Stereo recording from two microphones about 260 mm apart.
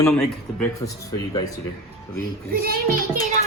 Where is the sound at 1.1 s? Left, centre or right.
Centre.